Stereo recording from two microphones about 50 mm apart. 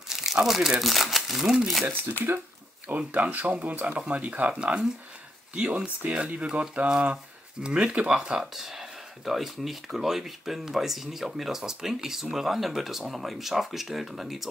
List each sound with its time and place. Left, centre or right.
0.1 s speech: centre
1.9 s speech: right
2.9 s speech: right
8.5 s speech: centre